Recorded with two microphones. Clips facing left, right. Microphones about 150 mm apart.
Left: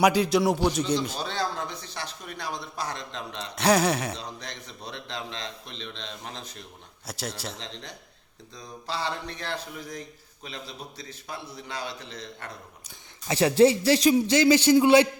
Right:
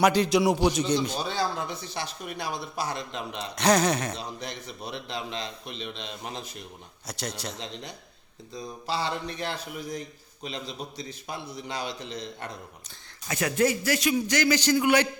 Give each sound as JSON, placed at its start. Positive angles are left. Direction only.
{"t": 0.0, "sound": "speech", "side_deg": 5}
{"t": 3.5, "sound": "speech", "side_deg": 5}
{"t": 4.1, "sound": "speech", "side_deg": -10}
{"t": 7.1, "sound": "speech", "side_deg": 5}
{"t": 7.6, "sound": "speech", "side_deg": -10}
{"t": 13.2, "sound": "a man's voice", "side_deg": 30}